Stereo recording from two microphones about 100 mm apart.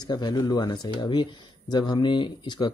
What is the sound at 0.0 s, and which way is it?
Speech, 45° left (ahead or behind).